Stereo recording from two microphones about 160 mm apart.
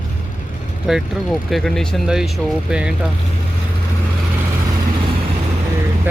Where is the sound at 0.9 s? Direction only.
Centre (ahead or behind).